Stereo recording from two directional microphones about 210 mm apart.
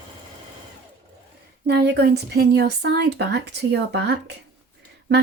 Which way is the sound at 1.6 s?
50° right (ahead or behind).